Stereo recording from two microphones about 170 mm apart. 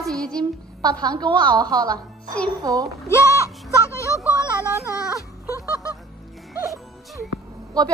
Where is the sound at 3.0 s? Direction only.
15° left (ahead or behind).